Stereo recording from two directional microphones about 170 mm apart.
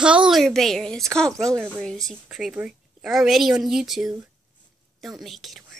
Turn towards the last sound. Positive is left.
turn(degrees=0)  # may be behind; listen again after turning